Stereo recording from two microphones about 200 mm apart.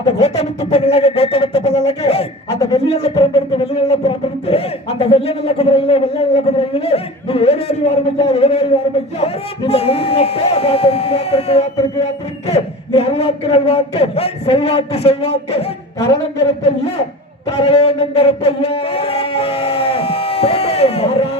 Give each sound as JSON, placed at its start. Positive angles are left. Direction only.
{"t": 0.2, "sound": "speech", "side_deg": 30}
{"t": 17.4, "sound": "speech", "side_deg": 30}